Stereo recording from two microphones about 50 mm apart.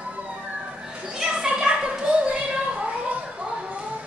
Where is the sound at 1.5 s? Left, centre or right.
Centre.